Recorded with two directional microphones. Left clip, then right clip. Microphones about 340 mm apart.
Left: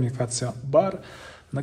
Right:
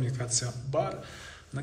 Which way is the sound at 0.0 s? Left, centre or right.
Centre.